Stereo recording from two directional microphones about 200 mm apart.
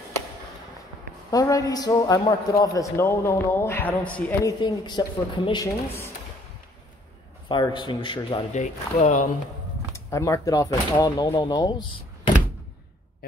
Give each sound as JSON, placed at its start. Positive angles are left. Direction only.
{"t": 1.3, "sound": "a man's voice", "side_deg": 15}
{"t": 4.6, "sound": "speech", "side_deg": 20}
{"t": 7.4, "sound": "speech", "side_deg": 25}
{"t": 8.5, "sound": "speech", "side_deg": 35}
{"t": 9.9, "sound": "speech", "side_deg": 15}